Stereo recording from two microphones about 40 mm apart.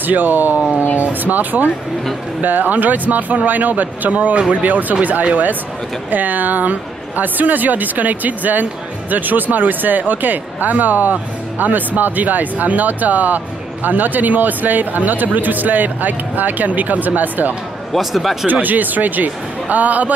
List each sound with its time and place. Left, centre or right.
0.0 s speech: right
17.9 s speech: centre
18.5 s speech: right